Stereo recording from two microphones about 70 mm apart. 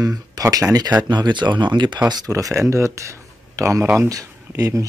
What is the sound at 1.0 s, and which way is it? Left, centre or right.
Speech, right.